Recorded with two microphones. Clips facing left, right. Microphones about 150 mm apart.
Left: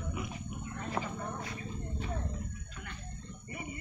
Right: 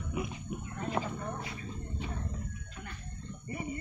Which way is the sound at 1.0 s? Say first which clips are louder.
Right 2 dB; centre (ahead or behind).